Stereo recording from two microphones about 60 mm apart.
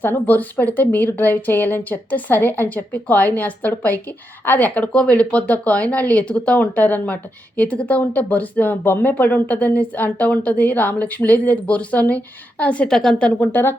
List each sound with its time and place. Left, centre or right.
0.0 s speech: left
4.9 s speech: centre
12.9 s a woman's voice: centre
13.4 s speech: left